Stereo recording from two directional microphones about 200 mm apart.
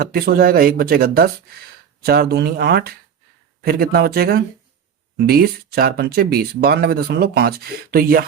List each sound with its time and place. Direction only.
0.0 s speech: 50° right (ahead or behind)